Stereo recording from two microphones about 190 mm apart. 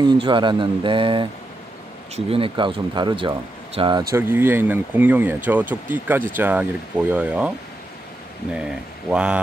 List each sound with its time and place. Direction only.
0.0 s speech: 25° right (ahead or behind)
4.1 s speech: 10° right (ahead or behind)